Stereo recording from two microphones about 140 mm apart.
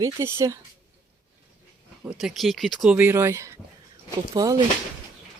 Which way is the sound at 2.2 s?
Centre (ahead or behind).